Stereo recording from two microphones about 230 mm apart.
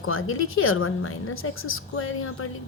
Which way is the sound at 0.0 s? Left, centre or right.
Left.